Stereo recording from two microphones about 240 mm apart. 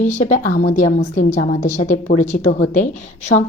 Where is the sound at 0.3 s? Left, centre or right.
Left.